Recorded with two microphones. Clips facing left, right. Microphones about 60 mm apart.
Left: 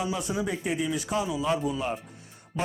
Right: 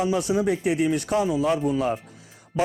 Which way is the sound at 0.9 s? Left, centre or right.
Right.